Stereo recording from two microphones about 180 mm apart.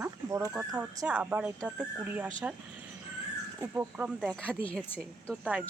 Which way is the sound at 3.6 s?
10° right (ahead or behind).